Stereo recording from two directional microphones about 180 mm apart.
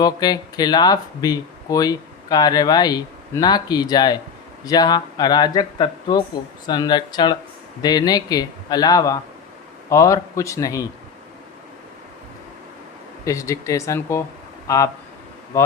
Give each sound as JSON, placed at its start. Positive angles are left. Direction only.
{"t": 0.0, "sound": "speech", "side_deg": 20}
{"t": 13.2, "sound": "speech", "side_deg": 15}